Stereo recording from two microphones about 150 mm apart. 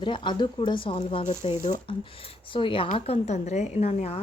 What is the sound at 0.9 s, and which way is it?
Speech, 45° left (ahead or behind).